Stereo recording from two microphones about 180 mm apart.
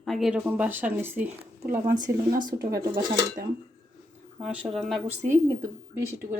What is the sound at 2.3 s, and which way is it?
Speech, 25° right (ahead or behind).